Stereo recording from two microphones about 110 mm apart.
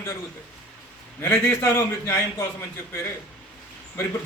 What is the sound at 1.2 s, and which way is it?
A man's voice, 20° left (ahead or behind).